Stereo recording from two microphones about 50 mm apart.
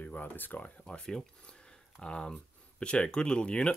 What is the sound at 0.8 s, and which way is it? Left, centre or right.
Speech, centre.